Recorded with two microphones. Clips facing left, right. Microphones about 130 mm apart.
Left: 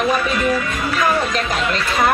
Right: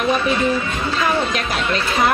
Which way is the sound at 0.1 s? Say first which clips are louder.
Even; 25° right (ahead or behind).